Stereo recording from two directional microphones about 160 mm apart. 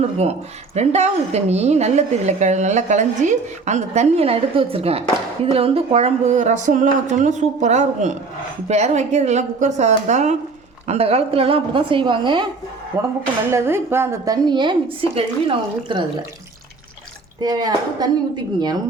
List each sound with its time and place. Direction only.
0.0 s a woman's voice: 40° right (ahead or behind)
12.9 s a woman's voice: 20° right (ahead or behind)
17.4 s a woman's voice: 25° right (ahead or behind)